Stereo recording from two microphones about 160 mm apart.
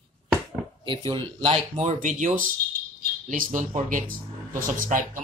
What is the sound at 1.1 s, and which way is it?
Speech, 30° right (ahead or behind).